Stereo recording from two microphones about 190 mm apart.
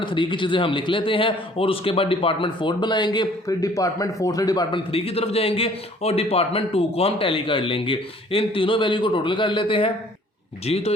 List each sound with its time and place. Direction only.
0.0 s a man's voice: 25° left (ahead or behind)